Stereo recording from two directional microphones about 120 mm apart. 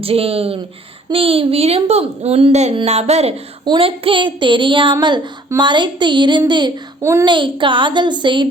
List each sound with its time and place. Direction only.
0.0 s a child's voice: 55° right (ahead or behind)
3.7 s a child's voice: 50° right (ahead or behind)
7.0 s a child's voice: 25° right (ahead or behind)
7.3 s a woman's voice: 45° right (ahead or behind)